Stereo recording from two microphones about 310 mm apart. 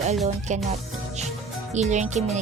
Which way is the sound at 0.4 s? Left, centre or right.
Right.